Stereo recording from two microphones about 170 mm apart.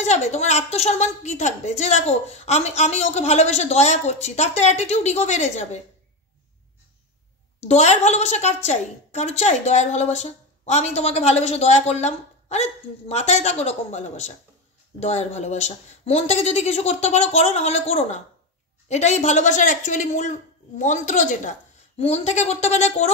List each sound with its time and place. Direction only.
0.0 s a woman's voice: 45° left (ahead or behind)
7.6 s a woman's voice: 40° left (ahead or behind)